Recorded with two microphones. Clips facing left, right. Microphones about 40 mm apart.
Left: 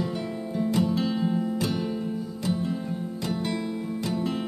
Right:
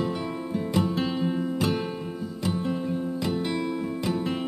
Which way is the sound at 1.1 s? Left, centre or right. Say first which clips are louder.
Left 1 dB; centre.